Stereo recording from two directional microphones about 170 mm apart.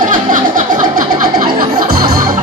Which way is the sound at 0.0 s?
50° right (ahead or behind).